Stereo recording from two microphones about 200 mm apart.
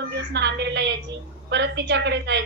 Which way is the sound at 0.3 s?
60° right (ahead or behind).